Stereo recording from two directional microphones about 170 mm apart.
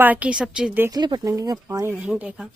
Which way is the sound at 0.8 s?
25° right (ahead or behind).